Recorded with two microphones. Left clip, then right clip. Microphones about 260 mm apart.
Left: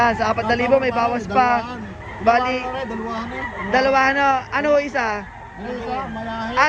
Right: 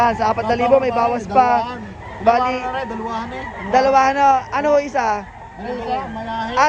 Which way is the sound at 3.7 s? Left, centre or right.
Centre.